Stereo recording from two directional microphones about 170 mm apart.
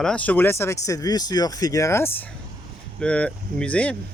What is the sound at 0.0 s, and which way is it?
Speech, 5° left (ahead or behind).